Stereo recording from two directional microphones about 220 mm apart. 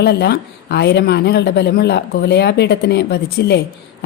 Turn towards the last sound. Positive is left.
turn(degrees=45)  # may be behind; listen again after turning